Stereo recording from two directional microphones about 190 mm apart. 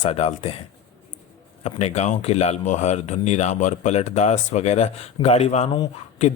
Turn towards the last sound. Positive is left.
turn(degrees=35)  # may be behind; listen again after turning